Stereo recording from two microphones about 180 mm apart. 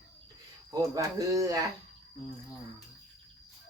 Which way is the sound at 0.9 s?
20° right (ahead or behind).